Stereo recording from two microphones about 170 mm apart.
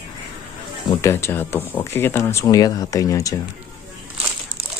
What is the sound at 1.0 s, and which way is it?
Speech, 15° left (ahead or behind).